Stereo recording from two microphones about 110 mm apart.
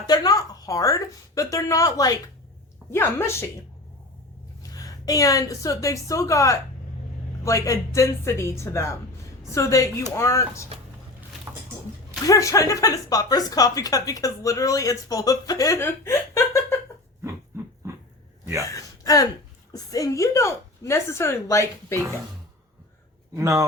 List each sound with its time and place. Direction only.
0.1 s a woman's voice: 35° left (ahead or behind)
4.7 s a woman's voice: 35° left (ahead or behind)
11.5 s a sound: 25° right (ahead or behind)
12.2 s a woman's voice: 30° left (ahead or behind)
18.6 s gasp: 30° left (ahead or behind)
19.7 s a woman's voice: 30° left (ahead or behind)
23.3 s speech: 30° right (ahead or behind)